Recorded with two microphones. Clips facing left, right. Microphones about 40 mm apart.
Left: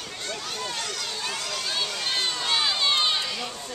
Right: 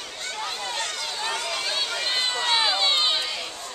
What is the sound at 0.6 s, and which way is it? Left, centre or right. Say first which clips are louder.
Run: right 2 dB; centre.